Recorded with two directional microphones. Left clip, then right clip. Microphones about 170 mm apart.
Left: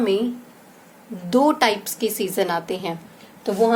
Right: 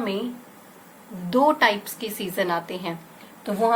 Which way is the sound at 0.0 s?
60° left (ahead or behind).